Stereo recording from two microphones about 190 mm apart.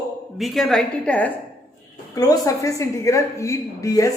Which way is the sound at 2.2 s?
20° left (ahead or behind).